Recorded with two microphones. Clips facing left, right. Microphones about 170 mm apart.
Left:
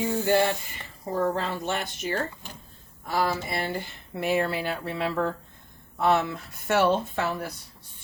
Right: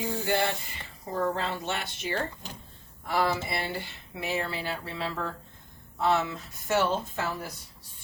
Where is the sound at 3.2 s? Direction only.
45° left (ahead or behind); by 7.3 s 65° left (ahead or behind).